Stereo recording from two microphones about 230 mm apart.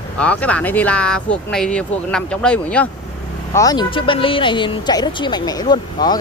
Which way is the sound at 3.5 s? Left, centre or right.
Centre.